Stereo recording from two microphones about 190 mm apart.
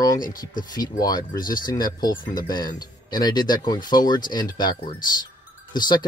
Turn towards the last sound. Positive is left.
turn(degrees=20)  # may be behind; listen again after turning